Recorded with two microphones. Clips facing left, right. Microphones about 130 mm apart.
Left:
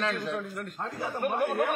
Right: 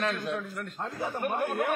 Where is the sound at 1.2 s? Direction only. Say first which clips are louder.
Left 3 dB; 10° left (ahead or behind).